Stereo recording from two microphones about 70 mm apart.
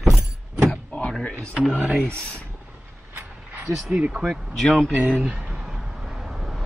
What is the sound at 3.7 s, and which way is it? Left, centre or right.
Speech, right.